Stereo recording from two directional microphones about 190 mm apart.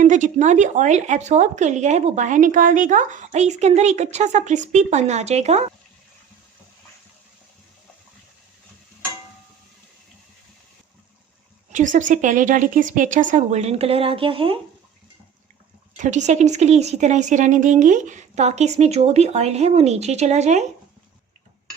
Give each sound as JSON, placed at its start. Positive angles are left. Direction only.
{"t": 0.0, "sound": "speech", "side_deg": -40}
{"t": 11.7, "sound": "speech", "side_deg": -40}
{"t": 16.0, "sound": "speech", "side_deg": -40}